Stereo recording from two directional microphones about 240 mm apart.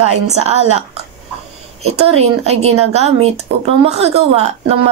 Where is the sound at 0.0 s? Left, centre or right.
Right.